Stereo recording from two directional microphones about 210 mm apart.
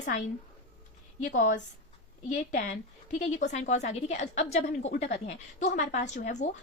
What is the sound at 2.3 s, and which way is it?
A woman's voice, 35° left (ahead or behind).